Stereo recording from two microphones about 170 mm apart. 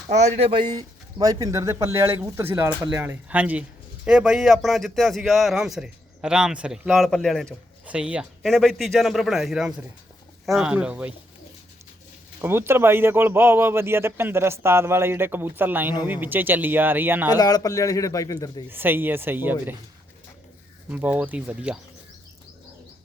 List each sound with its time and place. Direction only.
0.1 s a man's voice: 40° right (ahead or behind); by 11.1 s 5° right (ahead or behind)
12.4 s speech: 15° right (ahead or behind)
17.2 s a man's voice: 25° left (ahead or behind)
18.7 s speech: 10° right (ahead or behind)
20.9 s speech: 10° right (ahead or behind)